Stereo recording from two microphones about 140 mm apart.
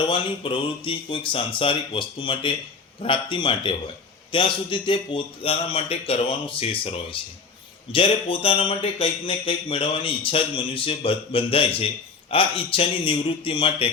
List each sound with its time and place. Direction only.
0.0 s speech: 35° left (ahead or behind)